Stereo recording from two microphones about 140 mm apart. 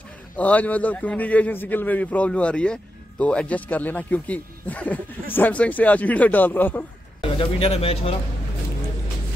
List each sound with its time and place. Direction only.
0.4 s a man's voice: 10° left (ahead or behind)
7.2 s speech: 40° left (ahead or behind)